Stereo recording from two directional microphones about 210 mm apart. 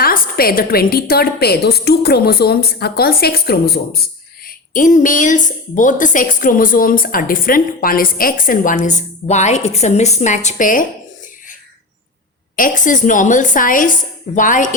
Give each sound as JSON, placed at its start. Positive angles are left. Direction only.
{"t": 0.0, "sound": "a woman's voice", "side_deg": 45}
{"t": 12.5, "sound": "a woman's voice", "side_deg": 40}